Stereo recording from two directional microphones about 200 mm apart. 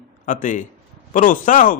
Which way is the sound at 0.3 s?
40° left (ahead or behind).